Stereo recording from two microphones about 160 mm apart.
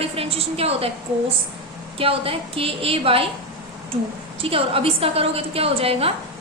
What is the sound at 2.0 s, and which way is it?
A woman's voice, 35° right (ahead or behind).